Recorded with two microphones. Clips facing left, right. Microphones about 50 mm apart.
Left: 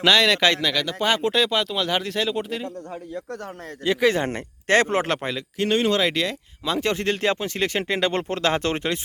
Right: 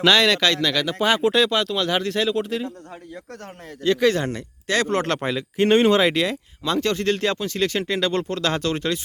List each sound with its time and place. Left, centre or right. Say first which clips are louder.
0.0 s speech: right 1 dB; centre
0.3 s speech: left 1 dB; centre
0.6 s speech: right 2 dB; centre
3.8 s a man's voice: right 1 dB; centre
4.2 s speech: left 1 dB; left
4.9 s a man's voice: right 1 dB; centre
5.5 s speech: right 5 dB; right; by 6.3 s centre
6.8 s speech: left 1 dB; left